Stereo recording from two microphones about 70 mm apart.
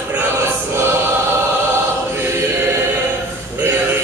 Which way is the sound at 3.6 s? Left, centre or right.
Right.